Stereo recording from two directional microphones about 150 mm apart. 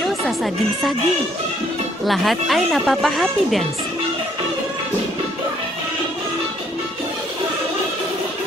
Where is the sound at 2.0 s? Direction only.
Centre (ahead or behind).